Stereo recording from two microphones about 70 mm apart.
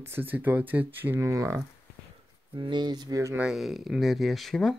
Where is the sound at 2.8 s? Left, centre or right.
Right.